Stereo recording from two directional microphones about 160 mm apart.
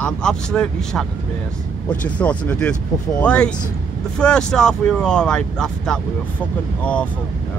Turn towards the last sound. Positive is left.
turn(degrees=10)  # may be behind; listen again after turning